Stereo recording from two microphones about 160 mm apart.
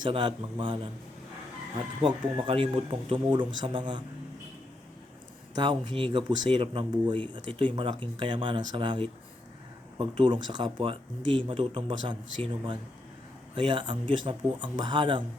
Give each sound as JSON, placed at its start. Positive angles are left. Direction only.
{"t": 0.0, "sound": "speech", "side_deg": -35}
{"t": 2.0, "sound": "speech", "side_deg": -30}
{"t": 5.5, "sound": "speech", "side_deg": -30}